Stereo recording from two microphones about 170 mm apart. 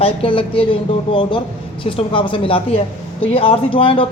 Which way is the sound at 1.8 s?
30° left (ahead or behind).